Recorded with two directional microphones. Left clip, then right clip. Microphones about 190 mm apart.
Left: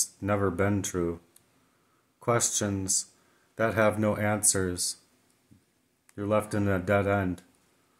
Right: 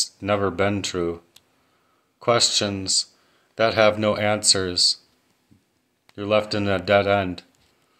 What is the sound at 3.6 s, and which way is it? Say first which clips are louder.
Speech: right 7 dB; 20° left (ahead or behind).